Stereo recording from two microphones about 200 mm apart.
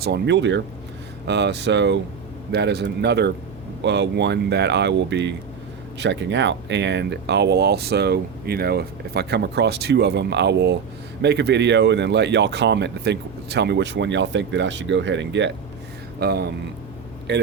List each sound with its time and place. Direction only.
0.0 s speech: 60° right (ahead or behind)